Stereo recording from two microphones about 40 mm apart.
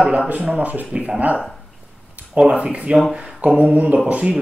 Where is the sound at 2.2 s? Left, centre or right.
Right.